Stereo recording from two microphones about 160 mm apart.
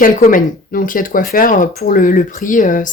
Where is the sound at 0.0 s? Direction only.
60° left (ahead or behind).